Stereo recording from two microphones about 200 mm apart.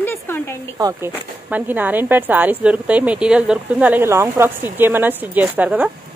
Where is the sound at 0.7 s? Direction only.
20° right (ahead or behind).